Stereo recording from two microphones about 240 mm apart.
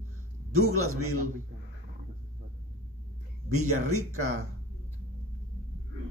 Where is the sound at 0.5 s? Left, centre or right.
Right.